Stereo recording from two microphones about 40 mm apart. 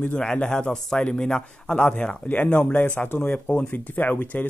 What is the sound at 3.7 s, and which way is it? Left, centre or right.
Speech, left.